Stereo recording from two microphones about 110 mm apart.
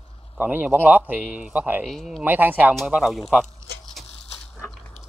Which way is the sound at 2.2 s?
15° right (ahead or behind).